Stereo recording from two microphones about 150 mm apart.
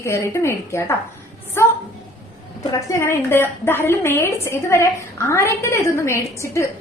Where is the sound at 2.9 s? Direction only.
15° left (ahead or behind).